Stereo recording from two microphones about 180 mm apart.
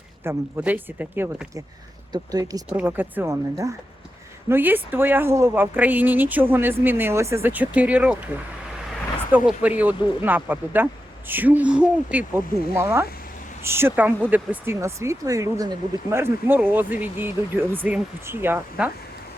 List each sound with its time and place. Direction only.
0.3 s speech: 10° right (ahead or behind)
2.6 s speech: 10° right (ahead or behind)
9.3 s speech: 10° right (ahead or behind)